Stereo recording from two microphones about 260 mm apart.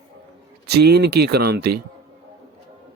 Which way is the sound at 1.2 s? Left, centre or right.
Right.